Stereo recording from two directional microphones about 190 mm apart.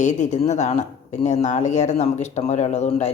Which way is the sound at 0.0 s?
40° left (ahead or behind).